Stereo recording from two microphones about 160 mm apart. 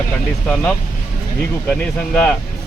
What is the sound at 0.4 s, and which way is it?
Speech, 5° left (ahead or behind).